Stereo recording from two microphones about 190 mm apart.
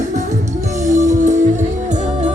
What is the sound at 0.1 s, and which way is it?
Music, 40° right (ahead or behind).